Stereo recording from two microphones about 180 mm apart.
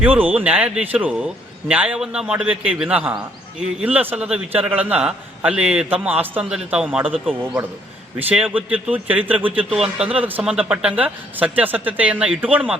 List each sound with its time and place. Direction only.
0.0 s a man's voice: 10° right (ahead or behind)
8.3 s a man's voice: 5° right (ahead or behind)